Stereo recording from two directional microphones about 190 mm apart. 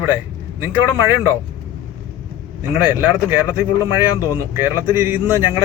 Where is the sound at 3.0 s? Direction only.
10° right (ahead or behind).